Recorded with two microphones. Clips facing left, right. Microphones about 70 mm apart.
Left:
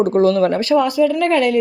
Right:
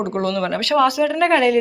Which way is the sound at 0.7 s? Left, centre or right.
Right.